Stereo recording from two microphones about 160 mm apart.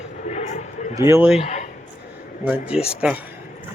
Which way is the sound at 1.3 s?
40° left (ahead or behind).